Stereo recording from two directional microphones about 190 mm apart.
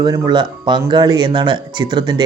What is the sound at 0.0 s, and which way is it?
Speech, 20° right (ahead or behind).